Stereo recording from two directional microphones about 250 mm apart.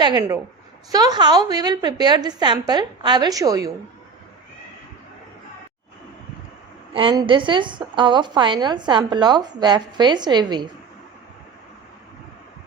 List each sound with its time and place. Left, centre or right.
0.0 s a woman's voice: centre
6.9 s a woman's voice: centre